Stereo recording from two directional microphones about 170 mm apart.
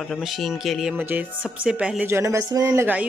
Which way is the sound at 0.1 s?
Centre (ahead or behind).